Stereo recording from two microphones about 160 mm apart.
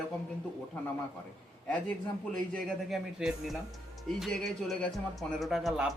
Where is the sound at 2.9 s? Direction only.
Centre (ahead or behind).